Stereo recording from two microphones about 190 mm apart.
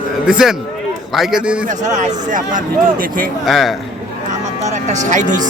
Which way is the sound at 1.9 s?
40° right (ahead or behind).